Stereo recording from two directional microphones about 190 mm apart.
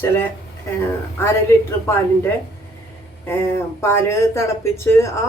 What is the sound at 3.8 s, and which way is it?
Speech, 15° left (ahead or behind).